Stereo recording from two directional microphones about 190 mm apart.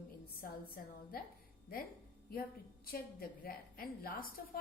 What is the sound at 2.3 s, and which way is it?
A woman's voice, 50° left (ahead or behind).